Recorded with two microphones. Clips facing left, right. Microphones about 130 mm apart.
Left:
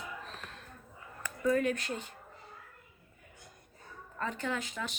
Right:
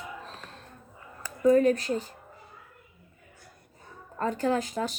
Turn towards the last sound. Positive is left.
turn(degrees=-40)  # may be behind; listen again after turning